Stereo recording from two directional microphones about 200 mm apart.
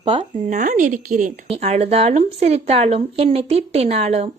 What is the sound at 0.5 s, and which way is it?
Speech, 40° right (ahead or behind).